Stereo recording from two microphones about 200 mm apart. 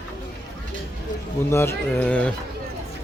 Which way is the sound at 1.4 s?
10° left (ahead or behind).